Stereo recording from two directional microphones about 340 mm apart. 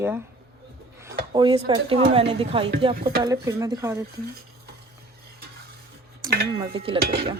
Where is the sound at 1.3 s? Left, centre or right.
Centre.